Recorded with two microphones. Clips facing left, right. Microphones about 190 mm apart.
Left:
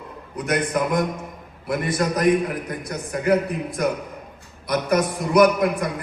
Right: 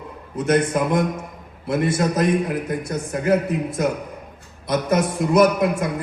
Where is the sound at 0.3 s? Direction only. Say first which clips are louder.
Right 4 dB; 25° right (ahead or behind).